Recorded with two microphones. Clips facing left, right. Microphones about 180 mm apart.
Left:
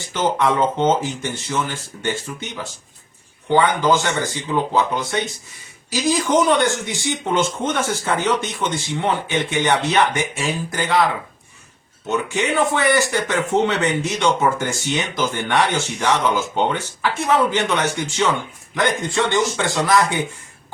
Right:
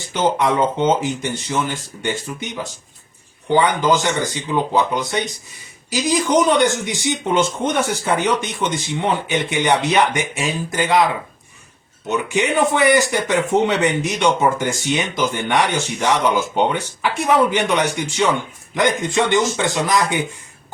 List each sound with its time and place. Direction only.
0.0 s speech: 20° right (ahead or behind)
3.5 s speech: 20° right (ahead or behind)